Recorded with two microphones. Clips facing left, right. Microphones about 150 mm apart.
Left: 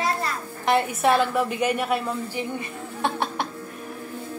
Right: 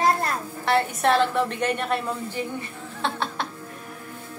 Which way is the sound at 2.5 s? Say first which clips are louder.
Left 2 dB; 15° left (ahead or behind).